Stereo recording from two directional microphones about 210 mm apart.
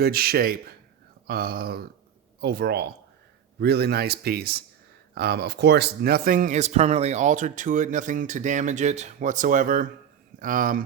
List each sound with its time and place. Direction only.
0.0 s speech: 45° right (ahead or behind)